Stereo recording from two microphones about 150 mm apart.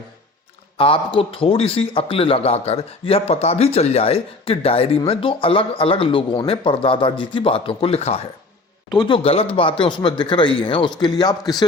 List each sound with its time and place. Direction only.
0.8 s a man's voice: 35° left (ahead or behind)